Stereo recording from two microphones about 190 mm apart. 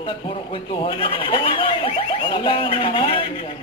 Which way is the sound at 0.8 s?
25° left (ahead or behind).